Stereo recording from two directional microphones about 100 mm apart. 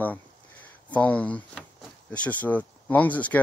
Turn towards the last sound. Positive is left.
turn(degrees=15)  # may be behind; listen again after turning